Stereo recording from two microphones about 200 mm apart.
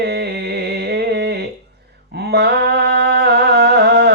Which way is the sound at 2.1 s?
55° right (ahead or behind).